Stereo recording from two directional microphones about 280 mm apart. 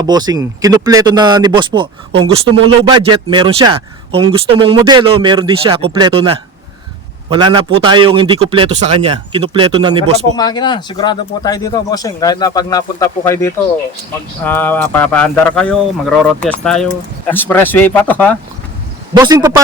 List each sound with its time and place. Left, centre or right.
0.0 s speech: centre
10.3 s speech: centre
19.1 s speech: centre